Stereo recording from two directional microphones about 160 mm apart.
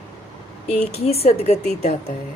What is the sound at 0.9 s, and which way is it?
Speech, 40° left (ahead or behind).